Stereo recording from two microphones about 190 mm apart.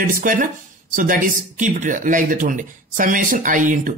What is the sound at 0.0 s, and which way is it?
Speech, 45° right (ahead or behind).